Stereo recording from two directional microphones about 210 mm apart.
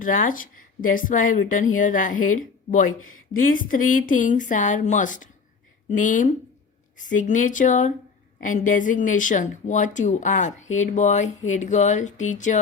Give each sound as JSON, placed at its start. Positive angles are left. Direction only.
{"t": 0.0, "sound": "speech", "side_deg": 40}